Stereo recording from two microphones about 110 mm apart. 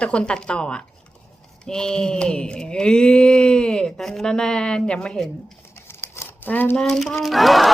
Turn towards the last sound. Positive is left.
turn(degrees=0)  # may be behind; listen again after turning